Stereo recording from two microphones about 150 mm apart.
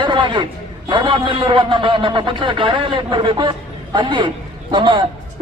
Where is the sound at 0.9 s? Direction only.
35° right (ahead or behind).